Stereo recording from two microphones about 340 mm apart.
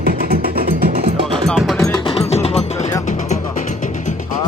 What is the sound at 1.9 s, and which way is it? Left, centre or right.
Music, centre.